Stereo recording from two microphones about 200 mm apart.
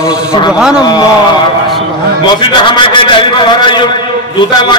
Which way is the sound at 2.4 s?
25° left (ahead or behind).